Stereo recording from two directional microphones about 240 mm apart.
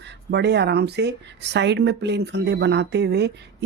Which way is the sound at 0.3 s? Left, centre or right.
Right.